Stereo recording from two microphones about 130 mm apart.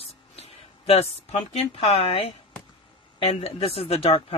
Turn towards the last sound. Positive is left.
turn(degrees=50)  # may be behind; listen again after turning